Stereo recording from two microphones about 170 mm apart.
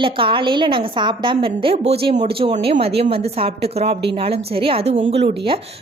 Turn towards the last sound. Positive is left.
turn(degrees=-35)  # may be behind; listen again after turning